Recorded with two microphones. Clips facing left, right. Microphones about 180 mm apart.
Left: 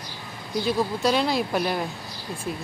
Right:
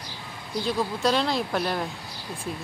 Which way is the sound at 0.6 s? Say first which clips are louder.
Left 2 dB; 5° left (ahead or behind).